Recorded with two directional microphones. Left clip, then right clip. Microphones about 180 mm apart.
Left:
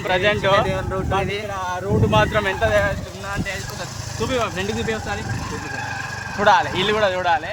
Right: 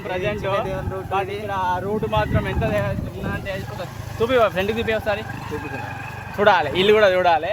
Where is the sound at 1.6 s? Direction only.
30° left (ahead or behind).